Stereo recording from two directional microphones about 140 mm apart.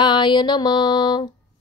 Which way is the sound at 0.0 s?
35° left (ahead or behind).